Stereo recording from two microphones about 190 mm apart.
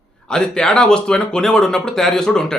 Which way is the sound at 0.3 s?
5° left (ahead or behind).